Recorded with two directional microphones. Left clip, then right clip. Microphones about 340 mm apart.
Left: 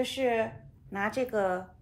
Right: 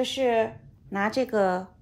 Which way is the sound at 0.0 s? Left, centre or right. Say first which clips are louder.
Right 5 dB; right.